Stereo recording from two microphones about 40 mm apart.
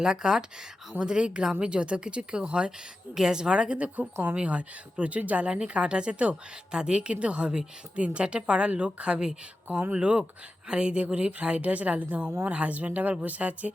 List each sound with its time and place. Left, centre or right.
0.0 s a woman's voice: centre
3.2 s a woman's voice: centre; by 5.5 s right
5.5 s a woman's voice: right